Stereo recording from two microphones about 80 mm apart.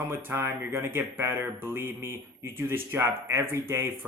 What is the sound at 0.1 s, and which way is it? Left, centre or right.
Speech, right.